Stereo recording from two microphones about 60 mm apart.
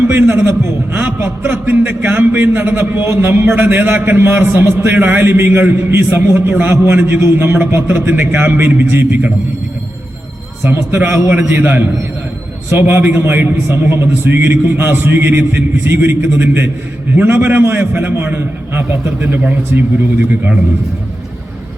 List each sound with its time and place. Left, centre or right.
0.1 s a man's voice: right
10.6 s a man's voice: right